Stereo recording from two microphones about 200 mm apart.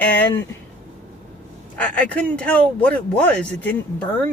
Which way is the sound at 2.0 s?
5° left (ahead or behind).